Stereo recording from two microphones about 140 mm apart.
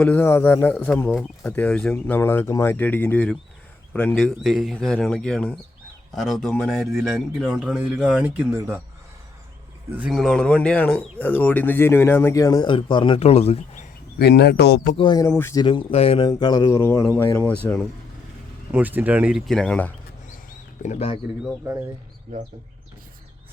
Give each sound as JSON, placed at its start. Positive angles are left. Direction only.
{"t": 0.0, "sound": "a man's voice", "side_deg": 15}
{"t": 10.1, "sound": "speech", "side_deg": 0}
{"t": 13.1, "sound": "speech", "side_deg": 50}
{"t": 14.9, "sound": "speech", "side_deg": 30}
{"t": 15.3, "sound": "speech", "side_deg": 15}
{"t": 15.5, "sound": "speech", "side_deg": 35}
{"t": 16.2, "sound": "speech", "side_deg": 30}
{"t": 18.7, "sound": "speech", "side_deg": -10}
{"t": 19.5, "sound": "speech", "side_deg": 5}
{"t": 20.8, "sound": "speech", "side_deg": 55}